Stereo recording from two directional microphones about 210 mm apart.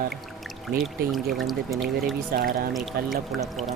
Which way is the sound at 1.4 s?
Centre (ahead or behind).